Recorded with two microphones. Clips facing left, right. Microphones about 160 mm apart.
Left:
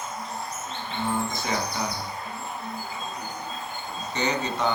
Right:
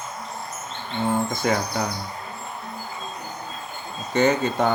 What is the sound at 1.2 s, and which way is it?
Mantra, 50° right (ahead or behind).